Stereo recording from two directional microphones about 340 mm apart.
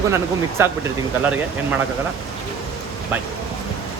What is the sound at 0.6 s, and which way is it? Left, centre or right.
Speech, centre.